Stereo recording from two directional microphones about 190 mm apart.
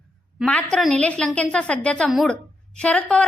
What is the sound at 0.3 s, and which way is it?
A woman's voice, 5° left (ahead or behind).